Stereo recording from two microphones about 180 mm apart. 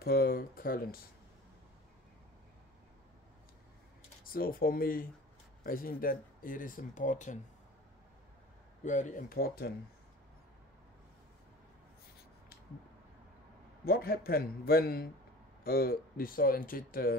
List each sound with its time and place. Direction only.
0.0 s a man's voice: 55° left (ahead or behind)
4.2 s speech: 55° left (ahead or behind)
8.8 s speech: 45° left (ahead or behind)
13.8 s a man's voice: 55° left (ahead or behind)